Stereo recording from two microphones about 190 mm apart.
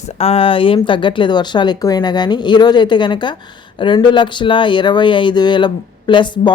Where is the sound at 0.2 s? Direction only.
30° left (ahead or behind).